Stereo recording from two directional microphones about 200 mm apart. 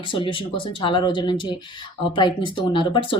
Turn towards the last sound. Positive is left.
turn(degrees=25)  # may be behind; listen again after turning